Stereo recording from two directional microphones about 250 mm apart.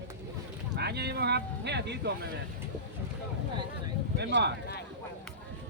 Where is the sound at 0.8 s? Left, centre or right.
Right.